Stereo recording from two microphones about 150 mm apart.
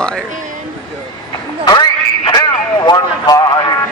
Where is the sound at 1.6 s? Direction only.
30° left (ahead or behind).